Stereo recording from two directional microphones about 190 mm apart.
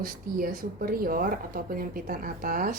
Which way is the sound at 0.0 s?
50° right (ahead or behind).